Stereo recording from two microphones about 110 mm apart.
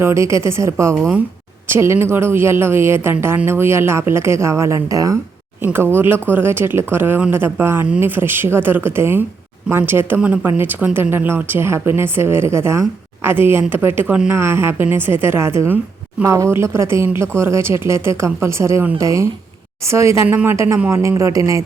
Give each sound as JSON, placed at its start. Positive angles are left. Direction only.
{"t": 0.0, "sound": "speech", "side_deg": -25}
{"t": 5.6, "sound": "speech", "side_deg": -20}
{"t": 21.0, "sound": "speech", "side_deg": -30}